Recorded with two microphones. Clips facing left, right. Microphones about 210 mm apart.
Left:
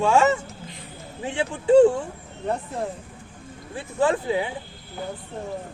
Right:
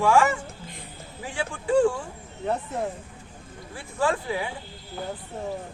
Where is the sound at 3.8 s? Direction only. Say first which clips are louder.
Left 4 dB; 20° left (ahead or behind).